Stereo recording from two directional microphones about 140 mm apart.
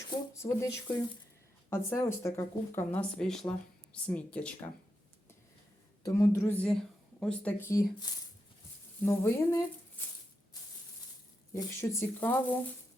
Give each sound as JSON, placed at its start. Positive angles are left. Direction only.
{"t": 0.3, "sound": "speech", "side_deg": 25}
{"t": 3.2, "sound": "speech", "side_deg": 5}
{"t": 6.0, "sound": "speech", "side_deg": 25}
{"t": 7.2, "sound": "speech", "side_deg": 5}
{"t": 7.6, "sound": "speech", "side_deg": 20}
{"t": 11.5, "sound": "speech", "side_deg": 20}